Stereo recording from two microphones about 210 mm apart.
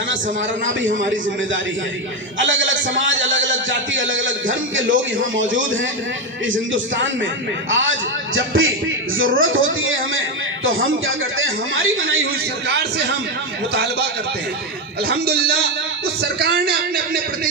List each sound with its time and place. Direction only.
0.6 s a man's voice: 60° right (ahead or behind)
15.0 s speech: 50° right (ahead or behind)